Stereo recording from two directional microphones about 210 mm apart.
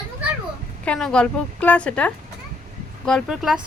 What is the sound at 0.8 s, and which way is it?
A woman's voice, 5° left (ahead or behind).